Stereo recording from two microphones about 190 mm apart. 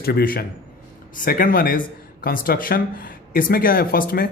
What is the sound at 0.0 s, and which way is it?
Speech, 50° left (ahead or behind).